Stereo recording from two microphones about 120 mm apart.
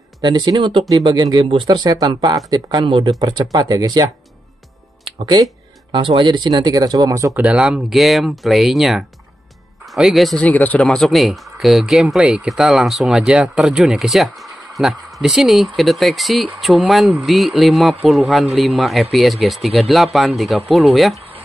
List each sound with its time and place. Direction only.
0.2 s speech: 40° right (ahead or behind)
5.2 s speech: 35° right (ahead or behind)
7.3 s speech: 10° right (ahead or behind)
10.4 s speech: 15° left (ahead or behind)